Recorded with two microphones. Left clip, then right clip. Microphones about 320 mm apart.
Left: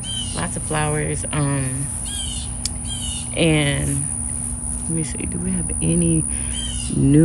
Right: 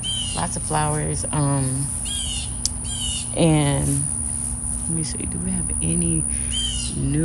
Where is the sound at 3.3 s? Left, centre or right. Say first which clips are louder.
Left 2 dB; centre.